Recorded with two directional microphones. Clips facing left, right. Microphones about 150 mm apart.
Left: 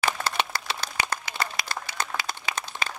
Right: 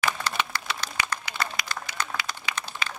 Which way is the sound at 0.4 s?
30° left (ahead or behind).